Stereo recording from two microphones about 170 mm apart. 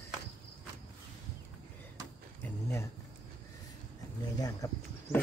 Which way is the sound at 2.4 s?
15° left (ahead or behind).